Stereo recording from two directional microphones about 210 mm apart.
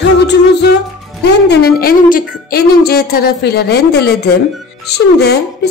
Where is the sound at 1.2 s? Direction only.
50° left (ahead or behind).